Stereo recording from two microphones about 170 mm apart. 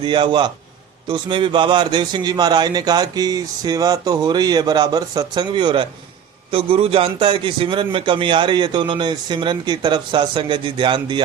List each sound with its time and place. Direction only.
0.0 s a man's voice: 25° right (ahead or behind)